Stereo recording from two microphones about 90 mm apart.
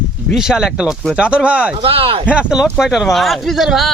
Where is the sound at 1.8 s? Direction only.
90° right.